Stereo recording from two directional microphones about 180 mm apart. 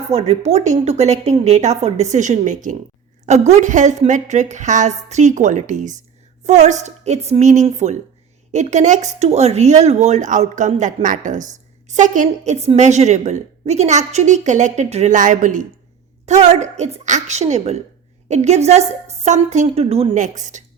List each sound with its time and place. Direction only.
0.1 s a woman's voice: 35° right (ahead or behind)